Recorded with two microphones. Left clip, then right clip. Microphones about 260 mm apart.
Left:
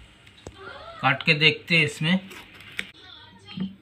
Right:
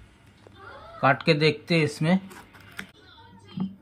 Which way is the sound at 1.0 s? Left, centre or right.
Centre.